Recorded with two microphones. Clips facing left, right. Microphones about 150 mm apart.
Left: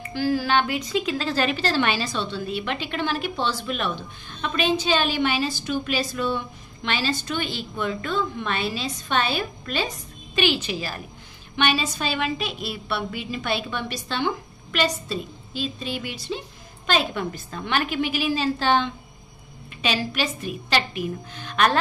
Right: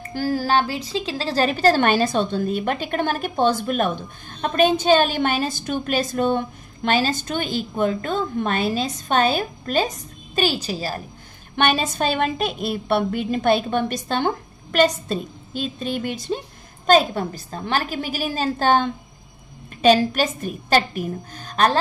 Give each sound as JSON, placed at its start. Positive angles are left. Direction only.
{"t": 0.0, "sound": "a woman's voice", "side_deg": -45}
{"t": 11.5, "sound": "a woman's voice", "side_deg": -50}